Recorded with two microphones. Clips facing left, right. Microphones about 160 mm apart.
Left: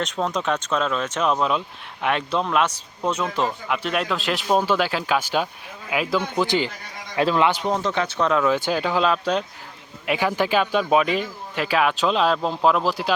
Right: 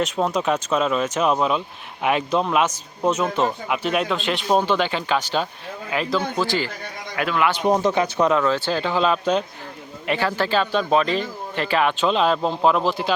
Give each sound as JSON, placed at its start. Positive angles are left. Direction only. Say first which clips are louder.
{"t": 0.0, "sound": "a man's voice", "louder": "right 3 dB", "side_deg": -10}
{"t": 7.6, "sound": "speech", "louder": "right 4 dB", "side_deg": -15}
{"t": 8.4, "sound": "speech", "louder": "even", "side_deg": 10}
{"t": 10.1, "sound": "speech", "louder": "even", "side_deg": 15}